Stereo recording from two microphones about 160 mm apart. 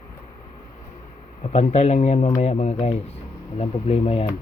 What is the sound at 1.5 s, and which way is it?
Speech, 45° left (ahead or behind).